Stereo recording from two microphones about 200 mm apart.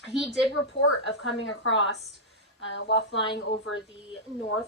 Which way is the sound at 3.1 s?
25° left (ahead or behind).